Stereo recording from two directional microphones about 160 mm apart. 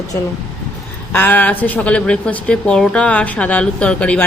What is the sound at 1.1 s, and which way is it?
Speech, 10° left (ahead or behind).